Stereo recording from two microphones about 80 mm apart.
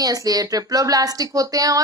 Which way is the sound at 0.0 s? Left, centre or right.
Right.